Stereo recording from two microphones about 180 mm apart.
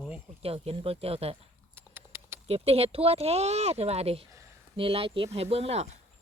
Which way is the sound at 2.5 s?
35° right (ahead or behind).